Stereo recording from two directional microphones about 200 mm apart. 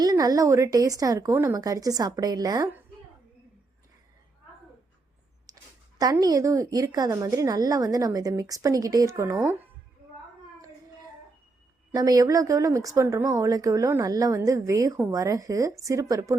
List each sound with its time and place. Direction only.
0.0 s speech: 20° right (ahead or behind)
5.5 s a sound: 20° right (ahead or behind)
6.0 s speech: 20° right (ahead or behind)
11.9 s speech: 20° right (ahead or behind)